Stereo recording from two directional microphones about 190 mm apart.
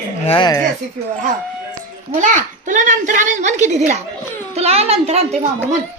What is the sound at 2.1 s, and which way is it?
A woman's voice, 40° right (ahead or behind).